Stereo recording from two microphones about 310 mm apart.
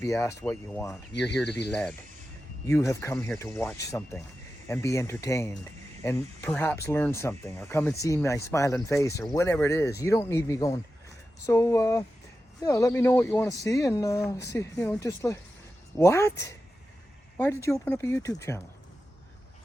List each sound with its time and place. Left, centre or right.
0.0 s speech: centre
1.5 s speech: left
1.7 s speech: centre
17.3 s speech: centre